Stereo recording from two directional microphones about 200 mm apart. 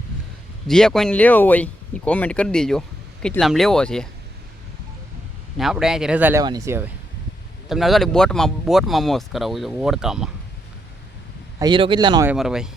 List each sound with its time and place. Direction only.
0.7 s speech: 5° left (ahead or behind)
5.5 s speech: centre (ahead or behind)
7.7 s speech: centre (ahead or behind)
11.6 s speech: 25° right (ahead or behind)
12.3 s speech: 5° right (ahead or behind)